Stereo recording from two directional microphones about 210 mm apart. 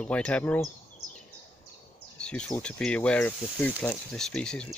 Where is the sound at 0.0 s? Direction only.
5° left (ahead or behind).